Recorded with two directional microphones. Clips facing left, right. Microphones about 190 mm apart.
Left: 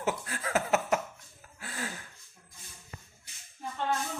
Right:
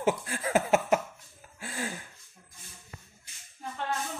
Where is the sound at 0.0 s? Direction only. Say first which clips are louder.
Right 4 dB; 25° right (ahead or behind).